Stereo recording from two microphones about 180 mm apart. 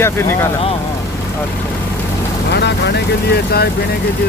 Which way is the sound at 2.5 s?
65° left (ahead or behind).